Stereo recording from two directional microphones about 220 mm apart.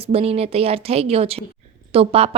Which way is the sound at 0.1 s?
25° right (ahead or behind).